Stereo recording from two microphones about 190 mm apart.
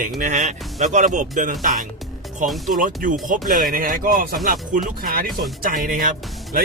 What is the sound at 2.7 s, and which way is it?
Speech, 45° right (ahead or behind).